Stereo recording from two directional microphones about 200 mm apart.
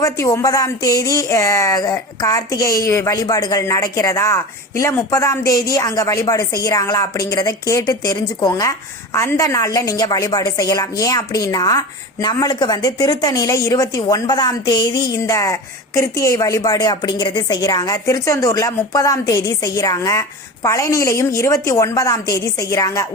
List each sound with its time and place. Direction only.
0.0 s speech: 15° left (ahead or behind)